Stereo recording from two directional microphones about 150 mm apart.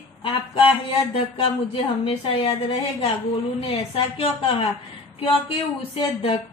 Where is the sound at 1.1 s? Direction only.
35° left (ahead or behind).